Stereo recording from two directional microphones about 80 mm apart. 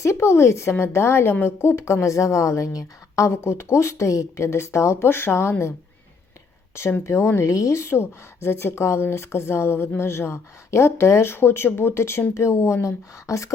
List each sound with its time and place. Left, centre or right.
0.0 s a woman's voice: left
6.7 s a woman's voice: left